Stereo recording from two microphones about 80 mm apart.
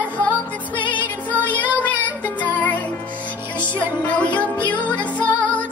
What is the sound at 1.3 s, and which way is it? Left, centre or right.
Music, centre.